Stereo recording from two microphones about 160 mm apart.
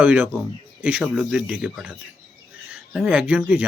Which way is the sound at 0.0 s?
10° right (ahead or behind).